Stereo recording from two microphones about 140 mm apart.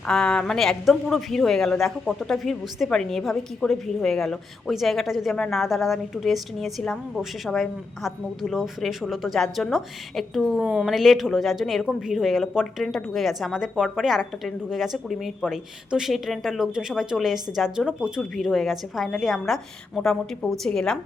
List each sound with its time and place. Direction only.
0.1 s a woman's voice: 5° left (ahead or behind)